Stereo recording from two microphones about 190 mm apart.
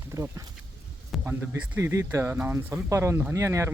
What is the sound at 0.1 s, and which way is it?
Speech, 15° right (ahead or behind).